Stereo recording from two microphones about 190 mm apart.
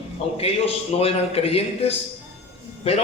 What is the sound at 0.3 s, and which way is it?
A man's voice, 30° left (ahead or behind).